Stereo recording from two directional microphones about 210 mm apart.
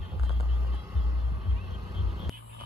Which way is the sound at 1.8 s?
25° right (ahead or behind).